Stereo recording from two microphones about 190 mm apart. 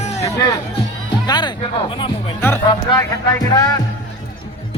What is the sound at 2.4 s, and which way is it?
Speech, 10° left (ahead or behind).